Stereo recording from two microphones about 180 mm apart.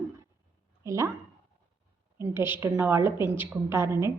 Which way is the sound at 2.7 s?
10° right (ahead or behind).